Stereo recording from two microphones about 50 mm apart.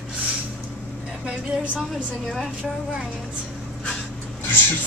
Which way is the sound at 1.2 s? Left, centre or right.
Right.